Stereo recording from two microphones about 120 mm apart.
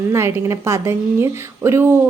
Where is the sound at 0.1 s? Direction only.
20° right (ahead or behind).